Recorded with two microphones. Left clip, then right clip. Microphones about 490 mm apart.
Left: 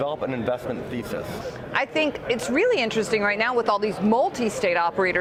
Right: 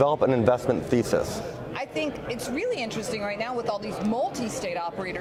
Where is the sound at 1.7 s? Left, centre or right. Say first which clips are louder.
Left 8 dB; left.